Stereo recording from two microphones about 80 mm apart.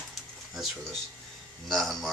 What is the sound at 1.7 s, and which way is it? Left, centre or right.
Speech, centre.